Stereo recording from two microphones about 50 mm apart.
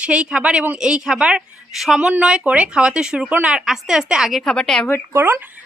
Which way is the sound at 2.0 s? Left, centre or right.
Right.